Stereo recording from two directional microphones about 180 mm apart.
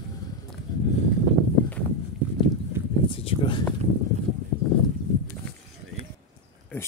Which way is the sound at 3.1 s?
30° left (ahead or behind).